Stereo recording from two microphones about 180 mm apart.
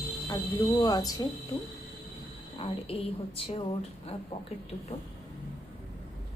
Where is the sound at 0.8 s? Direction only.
20° left (ahead or behind).